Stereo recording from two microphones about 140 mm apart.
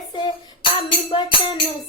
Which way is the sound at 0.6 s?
35° left (ahead or behind).